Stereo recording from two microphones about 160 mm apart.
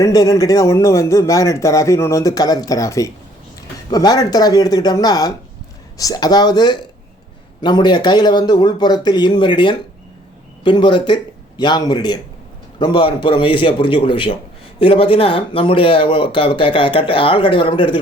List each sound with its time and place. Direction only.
0.0 s a man's voice: 20° left (ahead or behind)